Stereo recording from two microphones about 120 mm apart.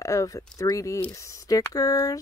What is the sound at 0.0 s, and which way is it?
Speech, 25° left (ahead or behind).